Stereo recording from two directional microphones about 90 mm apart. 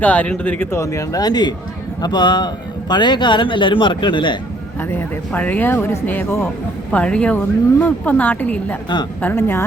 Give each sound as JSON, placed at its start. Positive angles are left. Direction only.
{"t": 0.0, "sound": "speech", "side_deg": 15}
{"t": 0.7, "sound": "speech", "side_deg": 35}
{"t": 4.8, "sound": "speech", "side_deg": 25}
{"t": 6.9, "sound": "speech", "side_deg": 15}
{"t": 9.3, "sound": "speech", "side_deg": 30}